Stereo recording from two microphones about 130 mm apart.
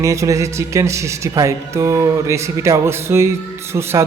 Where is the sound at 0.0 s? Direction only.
25° right (ahead or behind).